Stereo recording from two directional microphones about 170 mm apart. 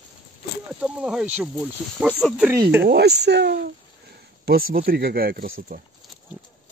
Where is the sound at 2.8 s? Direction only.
75° right (ahead or behind).